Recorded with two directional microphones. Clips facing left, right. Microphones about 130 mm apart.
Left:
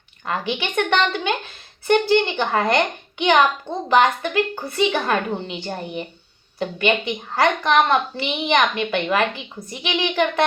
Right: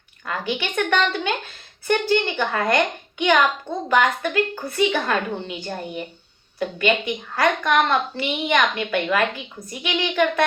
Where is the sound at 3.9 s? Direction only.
20° left (ahead or behind).